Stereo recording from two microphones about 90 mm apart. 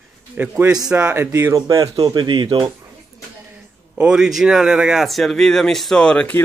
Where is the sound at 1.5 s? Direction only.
40° right (ahead or behind); by 2.7 s 65° right (ahead or behind).